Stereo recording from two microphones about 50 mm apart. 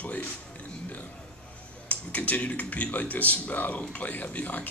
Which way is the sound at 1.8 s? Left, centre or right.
Left.